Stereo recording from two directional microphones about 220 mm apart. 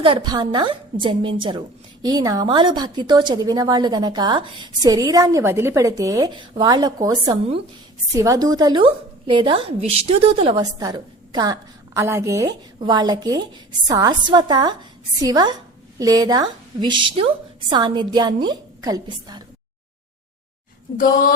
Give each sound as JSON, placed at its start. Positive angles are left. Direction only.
{"t": 0.0, "sound": "a woman's voice", "side_deg": -20}